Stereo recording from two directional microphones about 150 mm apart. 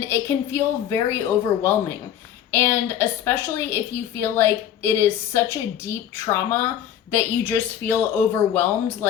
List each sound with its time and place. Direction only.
0.0 s a woman's voice: 15° left (ahead or behind)